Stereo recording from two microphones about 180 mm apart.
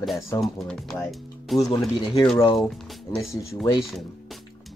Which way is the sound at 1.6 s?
20° left (ahead or behind).